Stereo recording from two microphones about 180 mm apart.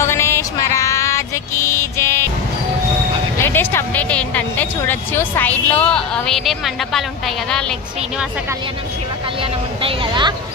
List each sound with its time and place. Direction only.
0.0 s music: 15° left (ahead or behind)
3.4 s a woman's voice: 10° left (ahead or behind)
9.4 s speech: 30° right (ahead or behind)